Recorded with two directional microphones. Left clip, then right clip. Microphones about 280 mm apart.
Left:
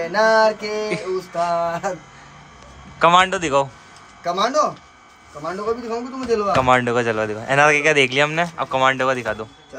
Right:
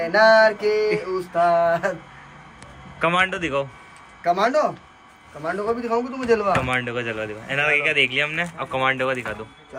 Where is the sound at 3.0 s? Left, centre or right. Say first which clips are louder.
Left 6 dB; centre.